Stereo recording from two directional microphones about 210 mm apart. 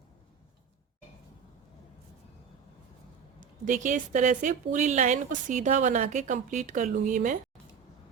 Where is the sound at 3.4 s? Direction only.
35° right (ahead or behind).